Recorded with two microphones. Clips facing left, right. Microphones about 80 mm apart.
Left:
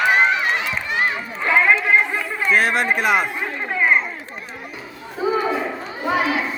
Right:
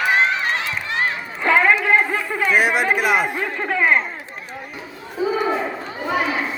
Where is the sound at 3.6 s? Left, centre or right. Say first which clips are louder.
Even; right.